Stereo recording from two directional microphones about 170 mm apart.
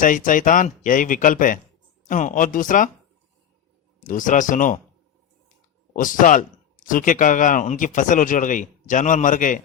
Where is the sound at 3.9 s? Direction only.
50° left (ahead or behind).